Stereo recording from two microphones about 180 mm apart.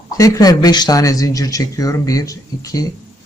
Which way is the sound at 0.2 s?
20° left (ahead or behind).